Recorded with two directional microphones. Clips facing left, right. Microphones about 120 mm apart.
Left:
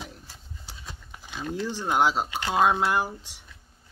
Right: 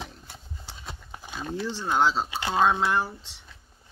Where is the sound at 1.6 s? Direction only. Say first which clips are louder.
Even; 15° left (ahead or behind).